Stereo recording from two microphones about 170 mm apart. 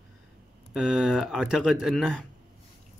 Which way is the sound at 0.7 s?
Centre (ahead or behind).